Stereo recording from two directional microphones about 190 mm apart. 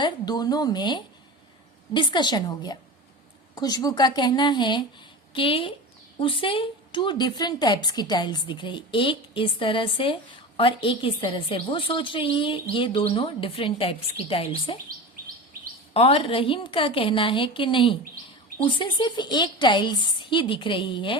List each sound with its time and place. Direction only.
0.0 s a woman's voice: 20° left (ahead or behind)
15.9 s a woman's voice: 30° left (ahead or behind)